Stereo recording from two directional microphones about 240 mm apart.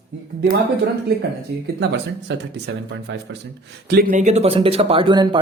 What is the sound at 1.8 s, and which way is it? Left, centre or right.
Speech, right.